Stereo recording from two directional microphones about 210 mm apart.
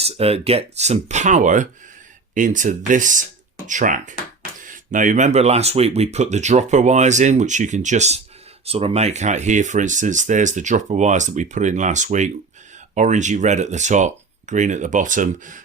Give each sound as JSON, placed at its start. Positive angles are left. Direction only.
{"t": 0.0, "sound": "speech", "side_deg": -30}